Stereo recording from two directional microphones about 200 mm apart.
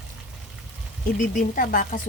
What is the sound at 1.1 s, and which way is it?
Speech, 40° left (ahead or behind).